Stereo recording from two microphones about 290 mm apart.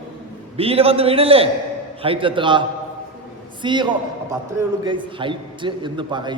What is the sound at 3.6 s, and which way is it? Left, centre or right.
A man's voice, centre.